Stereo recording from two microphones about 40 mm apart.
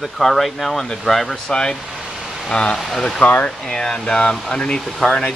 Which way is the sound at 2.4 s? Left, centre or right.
Left.